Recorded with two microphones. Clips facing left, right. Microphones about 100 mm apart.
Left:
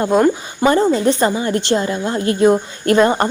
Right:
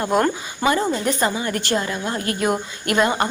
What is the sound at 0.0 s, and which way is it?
Speech, 20° left (ahead or behind).